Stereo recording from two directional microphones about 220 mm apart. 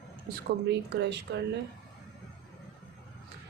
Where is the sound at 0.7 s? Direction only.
50° right (ahead or behind).